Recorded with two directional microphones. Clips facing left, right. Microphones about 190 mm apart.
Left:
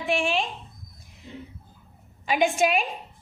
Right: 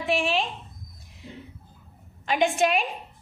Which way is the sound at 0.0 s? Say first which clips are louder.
Even; centre (ahead or behind).